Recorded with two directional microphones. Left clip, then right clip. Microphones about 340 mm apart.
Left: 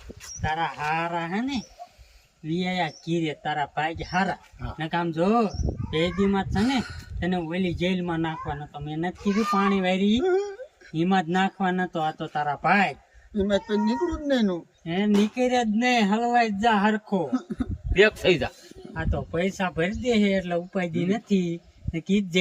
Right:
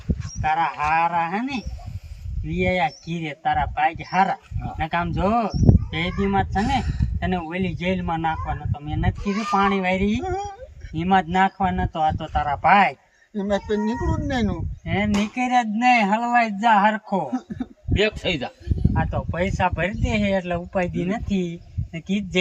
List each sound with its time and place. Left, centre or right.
0.4 s speech: centre
2.6 s speech: centre
17.6 s a sound: centre
18.9 s speech: centre